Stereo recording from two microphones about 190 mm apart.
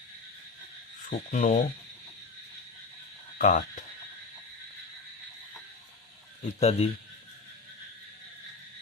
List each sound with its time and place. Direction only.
1.1 s speech: 45° left (ahead or behind)
3.3 s speech: 40° left (ahead or behind)
6.4 s speech: 35° left (ahead or behind)